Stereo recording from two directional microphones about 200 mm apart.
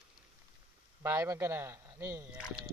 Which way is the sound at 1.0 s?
10° right (ahead or behind).